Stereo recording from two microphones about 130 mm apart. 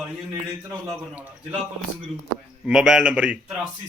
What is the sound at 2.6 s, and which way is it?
Speech, 5° right (ahead or behind).